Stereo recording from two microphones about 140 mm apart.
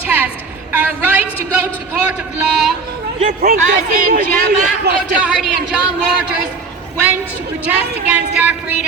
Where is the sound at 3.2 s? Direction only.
70° right (ahead or behind).